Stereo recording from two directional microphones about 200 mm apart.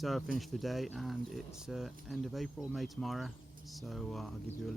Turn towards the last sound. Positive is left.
turn(degrees=0)  # may be behind; listen again after turning